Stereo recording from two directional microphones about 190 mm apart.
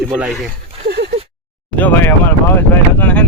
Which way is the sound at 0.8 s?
55° right (ahead or behind).